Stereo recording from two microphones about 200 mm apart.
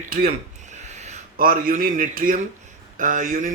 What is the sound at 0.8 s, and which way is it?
Speech, 35° right (ahead or behind).